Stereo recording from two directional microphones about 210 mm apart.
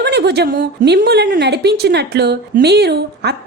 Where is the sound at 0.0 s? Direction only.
50° right (ahead or behind).